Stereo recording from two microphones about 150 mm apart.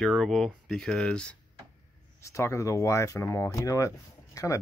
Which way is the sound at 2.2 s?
20° left (ahead or behind).